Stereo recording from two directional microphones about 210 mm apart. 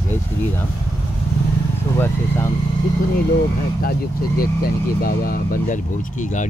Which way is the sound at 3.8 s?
45° left (ahead or behind).